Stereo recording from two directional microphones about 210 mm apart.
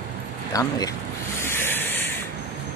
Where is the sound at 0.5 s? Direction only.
15° left (ahead or behind).